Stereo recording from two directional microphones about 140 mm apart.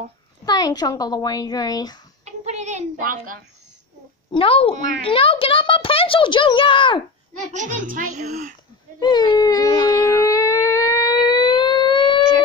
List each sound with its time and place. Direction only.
0.5 s a child's voice: 30° left (ahead or behind)
2.2 s music: 55° right (ahead or behind)
4.3 s a child's voice: 40° left (ahead or behind)
7.5 s a woman's voice: 65° right (ahead or behind)
9.0 s a sound: 30° left (ahead or behind)